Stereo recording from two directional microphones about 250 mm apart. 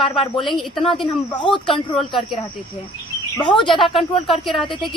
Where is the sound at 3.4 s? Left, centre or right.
Centre.